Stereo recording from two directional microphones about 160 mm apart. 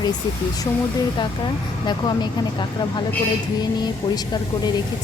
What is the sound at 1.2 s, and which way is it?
Speech, 30° left (ahead or behind).